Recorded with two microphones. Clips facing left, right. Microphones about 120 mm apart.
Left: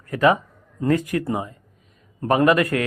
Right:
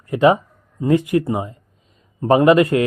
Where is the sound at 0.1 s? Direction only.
20° right (ahead or behind).